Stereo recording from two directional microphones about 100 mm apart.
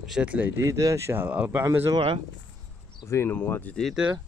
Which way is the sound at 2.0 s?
60° right (ahead or behind).